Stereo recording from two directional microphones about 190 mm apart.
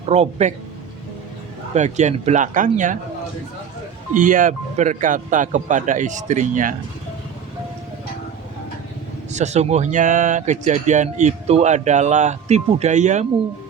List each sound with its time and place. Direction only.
0.0 s speech: 30° right (ahead or behind)
1.7 s speech: 40° right (ahead or behind)
4.1 s speech: 45° right (ahead or behind)
9.3 s speech: 35° right (ahead or behind)